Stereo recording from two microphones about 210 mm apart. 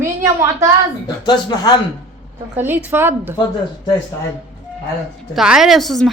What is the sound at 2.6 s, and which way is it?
Speech, 10° right (ahead or behind).